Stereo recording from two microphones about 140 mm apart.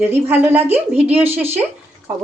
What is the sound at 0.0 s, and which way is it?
Speech, 15° right (ahead or behind).